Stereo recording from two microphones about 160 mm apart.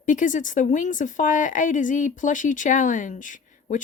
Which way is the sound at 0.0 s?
55° left (ahead or behind).